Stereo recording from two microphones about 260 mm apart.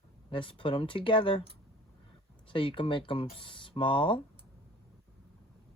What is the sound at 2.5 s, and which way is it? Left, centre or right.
Speech, centre.